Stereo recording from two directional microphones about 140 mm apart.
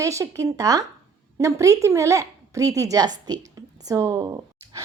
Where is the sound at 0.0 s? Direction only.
20° right (ahead or behind).